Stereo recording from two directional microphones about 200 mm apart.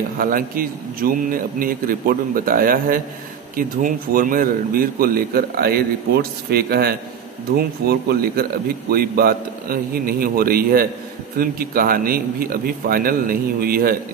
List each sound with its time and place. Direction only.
0.2 s speech: 45° right (ahead or behind)